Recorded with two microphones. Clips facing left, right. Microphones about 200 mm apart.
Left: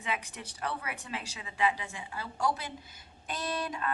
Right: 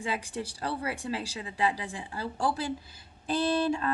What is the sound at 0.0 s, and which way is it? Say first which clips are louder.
Speech: right 4 dB; 30° right (ahead or behind).